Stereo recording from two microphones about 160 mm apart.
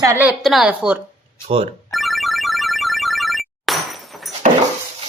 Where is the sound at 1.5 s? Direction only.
35° right (ahead or behind).